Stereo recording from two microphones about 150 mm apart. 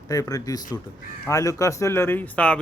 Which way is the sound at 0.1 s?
25° left (ahead or behind).